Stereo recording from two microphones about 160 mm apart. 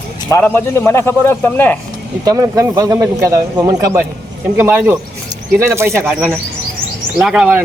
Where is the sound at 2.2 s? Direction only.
25° right (ahead or behind).